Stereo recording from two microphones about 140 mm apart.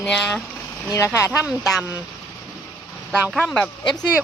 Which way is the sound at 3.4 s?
5° left (ahead or behind).